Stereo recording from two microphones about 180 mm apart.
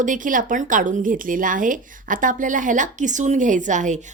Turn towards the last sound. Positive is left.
turn(degrees=-45)  # may be behind; listen again after turning